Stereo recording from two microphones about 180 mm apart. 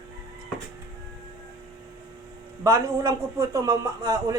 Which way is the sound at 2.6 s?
20° right (ahead or behind).